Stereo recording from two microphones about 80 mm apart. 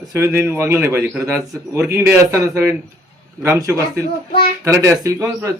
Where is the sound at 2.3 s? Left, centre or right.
Right.